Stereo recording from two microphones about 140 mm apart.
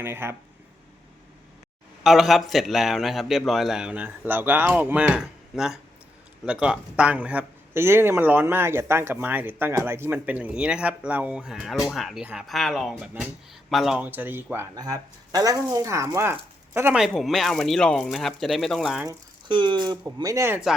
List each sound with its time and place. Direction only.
0.0 s speech: 15° right (ahead or behind)
2.0 s a man's voice: centre (ahead or behind)
14.8 s speech: 25° right (ahead or behind)
17.0 s a man's voice: centre (ahead or behind)
19.0 s speech: 35° right (ahead or behind)